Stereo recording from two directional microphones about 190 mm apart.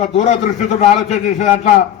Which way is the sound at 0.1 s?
40° left (ahead or behind).